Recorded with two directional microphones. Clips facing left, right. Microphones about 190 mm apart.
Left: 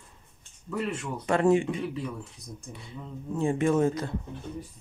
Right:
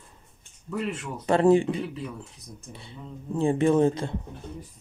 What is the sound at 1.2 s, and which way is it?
Speech, 30° right (ahead or behind).